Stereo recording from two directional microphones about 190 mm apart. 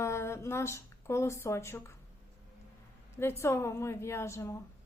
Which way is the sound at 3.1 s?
15° left (ahead or behind).